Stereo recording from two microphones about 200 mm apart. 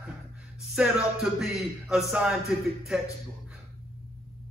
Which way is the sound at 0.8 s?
5° right (ahead or behind).